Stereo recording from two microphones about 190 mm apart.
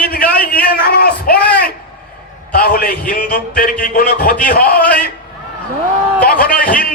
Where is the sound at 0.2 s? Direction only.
5° left (ahead or behind).